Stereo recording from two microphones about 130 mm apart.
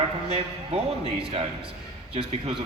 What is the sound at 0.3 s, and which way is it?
A man's voice, 50° right (ahead or behind).